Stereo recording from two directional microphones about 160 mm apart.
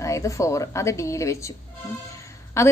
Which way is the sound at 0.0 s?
20° left (ahead or behind).